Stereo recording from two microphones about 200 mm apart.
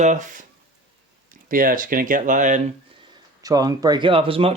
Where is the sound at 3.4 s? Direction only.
15° right (ahead or behind).